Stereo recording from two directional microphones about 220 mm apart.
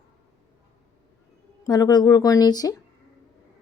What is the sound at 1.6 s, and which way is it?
A woman's voice, 15° left (ahead or behind).